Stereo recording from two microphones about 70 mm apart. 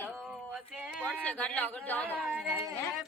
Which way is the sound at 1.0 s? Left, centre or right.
Left.